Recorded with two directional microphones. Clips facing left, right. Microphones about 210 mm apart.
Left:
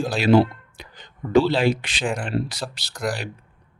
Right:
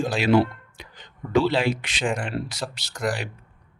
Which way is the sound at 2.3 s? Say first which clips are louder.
Left 4 dB; 35° left (ahead or behind).